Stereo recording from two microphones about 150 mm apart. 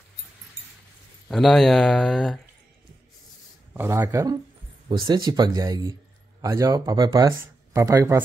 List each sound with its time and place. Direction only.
1.3 s speech: centre (ahead or behind)
3.7 s speech: 15° right (ahead or behind)